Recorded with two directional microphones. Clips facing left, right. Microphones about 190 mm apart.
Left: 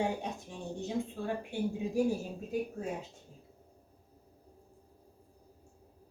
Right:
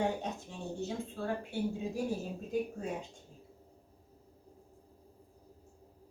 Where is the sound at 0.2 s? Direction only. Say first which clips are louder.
Even; 15° left (ahead or behind).